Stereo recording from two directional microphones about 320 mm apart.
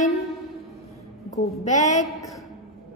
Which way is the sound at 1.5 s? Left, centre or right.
Left.